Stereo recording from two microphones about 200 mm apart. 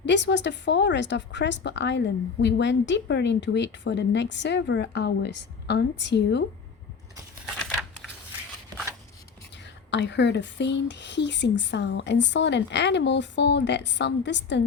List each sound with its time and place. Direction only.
0.0 s a woman's voice: 60° left (ahead or behind)
9.9 s a woman's voice: 60° left (ahead or behind)